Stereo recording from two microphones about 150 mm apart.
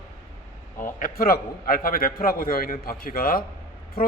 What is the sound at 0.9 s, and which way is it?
A man's voice, 70° left (ahead or behind).